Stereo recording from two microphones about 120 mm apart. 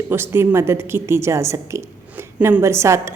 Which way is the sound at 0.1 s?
20° right (ahead or behind).